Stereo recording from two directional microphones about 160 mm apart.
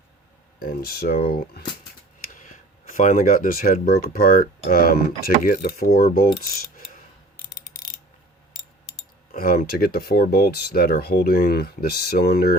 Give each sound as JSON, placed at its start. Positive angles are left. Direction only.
{"t": 0.6, "sound": "speech", "side_deg": 70}
{"t": 2.3, "sound": "speech", "side_deg": 55}
{"t": 9.3, "sound": "speech", "side_deg": 65}